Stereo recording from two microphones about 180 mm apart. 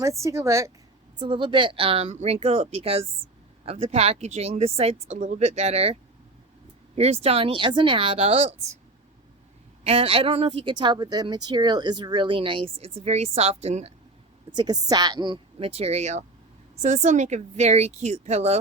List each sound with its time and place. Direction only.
0.0 s a woman's voice: 15° right (ahead or behind)
1.2 s a woman's voice: 25° right (ahead or behind)
9.8 s a woman's voice: 35° right (ahead or behind)
14.5 s a woman's voice: 25° right (ahead or behind)